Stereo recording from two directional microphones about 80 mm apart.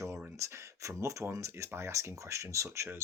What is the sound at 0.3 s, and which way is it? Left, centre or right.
Speech, right.